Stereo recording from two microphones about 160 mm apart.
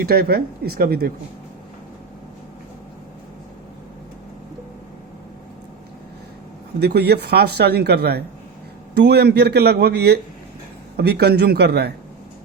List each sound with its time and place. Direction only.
0.0 s speech: 75° right (ahead or behind)
6.7 s a man's voice: 90° right